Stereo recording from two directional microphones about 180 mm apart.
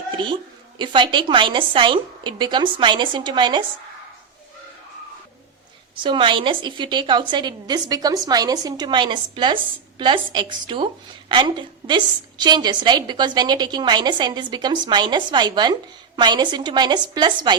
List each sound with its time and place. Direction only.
0.8 s a woman's voice: 25° right (ahead or behind)
6.0 s a woman's voice: 25° right (ahead or behind)